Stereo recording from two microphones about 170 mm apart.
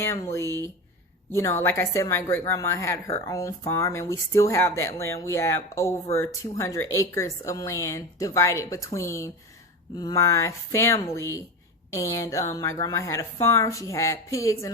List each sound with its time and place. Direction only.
0.0 s speech: 15° left (ahead or behind)